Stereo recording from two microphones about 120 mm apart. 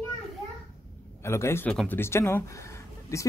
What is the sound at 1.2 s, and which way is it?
Speech, 20° left (ahead or behind).